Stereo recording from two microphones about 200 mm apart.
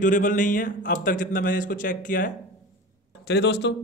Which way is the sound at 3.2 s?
60° left (ahead or behind).